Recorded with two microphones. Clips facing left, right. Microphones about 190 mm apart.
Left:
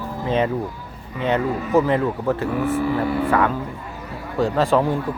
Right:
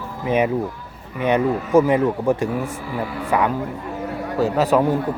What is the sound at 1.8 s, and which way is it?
A man's voice, 15° right (ahead or behind).